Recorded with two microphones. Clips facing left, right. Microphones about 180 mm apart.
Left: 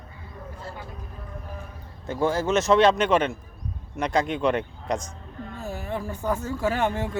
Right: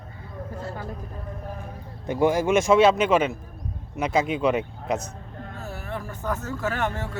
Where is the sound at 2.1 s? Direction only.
15° right (ahead or behind).